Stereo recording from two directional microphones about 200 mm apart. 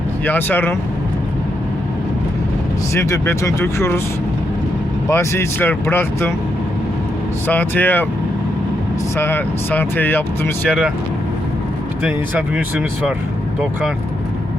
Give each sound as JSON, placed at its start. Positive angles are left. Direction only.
{"t": 0.3, "sound": "speech", "side_deg": 10}
{"t": 2.9, "sound": "speech", "side_deg": 15}
{"t": 5.0, "sound": "speech", "side_deg": 15}
{"t": 7.4, "sound": "speech", "side_deg": 10}
{"t": 9.1, "sound": "speech", "side_deg": 10}
{"t": 10.7, "sound": "speech", "side_deg": -5}
{"t": 12.0, "sound": "speech", "side_deg": -5}